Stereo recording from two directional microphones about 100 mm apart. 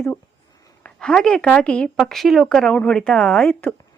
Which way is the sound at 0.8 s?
10° left (ahead or behind).